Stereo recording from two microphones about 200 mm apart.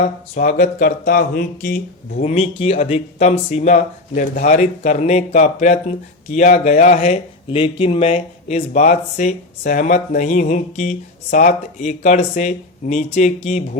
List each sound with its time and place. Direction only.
0.0 s speech: 40° left (ahead or behind)
2.2 s speech: 30° left (ahead or behind)